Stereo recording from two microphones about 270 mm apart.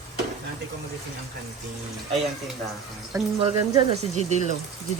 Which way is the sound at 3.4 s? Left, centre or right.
Right.